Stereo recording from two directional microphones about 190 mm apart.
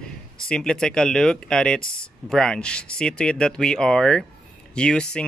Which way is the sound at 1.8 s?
50° left (ahead or behind).